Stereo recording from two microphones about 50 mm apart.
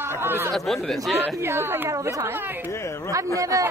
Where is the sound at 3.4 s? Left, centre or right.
Right.